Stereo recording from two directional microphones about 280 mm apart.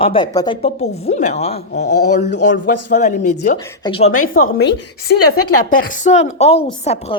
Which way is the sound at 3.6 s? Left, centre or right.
Centre.